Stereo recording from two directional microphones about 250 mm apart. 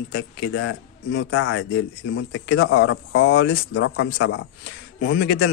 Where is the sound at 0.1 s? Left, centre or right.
Left.